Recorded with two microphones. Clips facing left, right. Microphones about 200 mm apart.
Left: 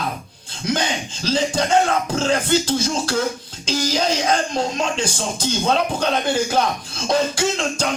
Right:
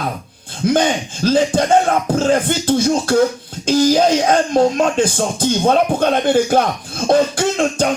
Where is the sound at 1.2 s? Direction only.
50° right (ahead or behind).